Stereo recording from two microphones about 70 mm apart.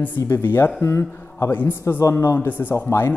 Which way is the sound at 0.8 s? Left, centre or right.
Left.